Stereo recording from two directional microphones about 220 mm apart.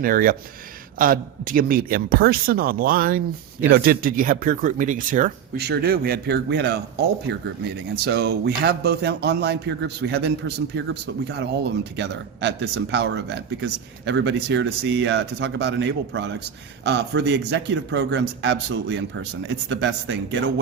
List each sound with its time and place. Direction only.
0.0 s a man's voice: 40° right (ahead or behind)